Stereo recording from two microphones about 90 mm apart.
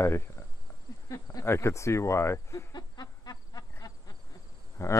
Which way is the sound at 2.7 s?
45° left (ahead or behind).